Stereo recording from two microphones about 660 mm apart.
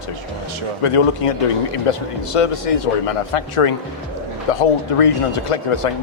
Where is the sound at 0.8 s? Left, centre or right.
Left.